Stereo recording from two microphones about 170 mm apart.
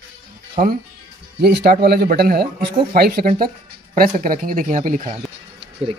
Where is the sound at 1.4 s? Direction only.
65° right (ahead or behind); by 5.1 s 45° right (ahead or behind).